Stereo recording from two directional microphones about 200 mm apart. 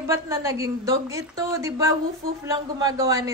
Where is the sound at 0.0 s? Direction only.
15° right (ahead or behind).